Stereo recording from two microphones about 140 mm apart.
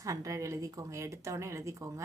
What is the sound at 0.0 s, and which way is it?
A woman's voice, 25° right (ahead or behind).